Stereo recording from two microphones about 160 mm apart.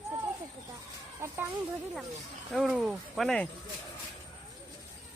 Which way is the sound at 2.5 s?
Centre (ahead or behind).